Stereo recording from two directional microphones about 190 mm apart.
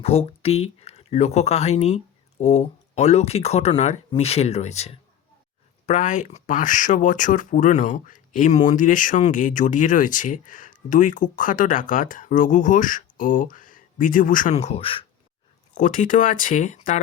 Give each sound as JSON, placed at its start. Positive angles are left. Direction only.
{"t": 0.0, "sound": "speech", "side_deg": 30}
{"t": 15.7, "sound": "speech", "side_deg": 40}